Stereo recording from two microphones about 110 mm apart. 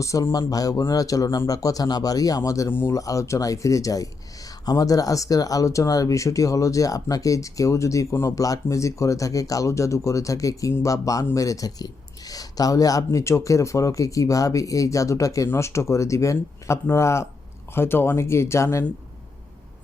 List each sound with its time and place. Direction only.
0.0 s speech: 30° left (ahead or behind)